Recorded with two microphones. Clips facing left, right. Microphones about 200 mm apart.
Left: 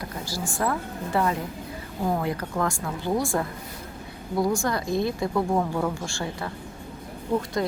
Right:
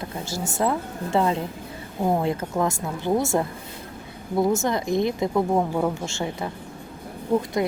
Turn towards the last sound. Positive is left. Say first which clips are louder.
# right 3 dB
turn(degrees=-15)  # may be behind; listen again after turning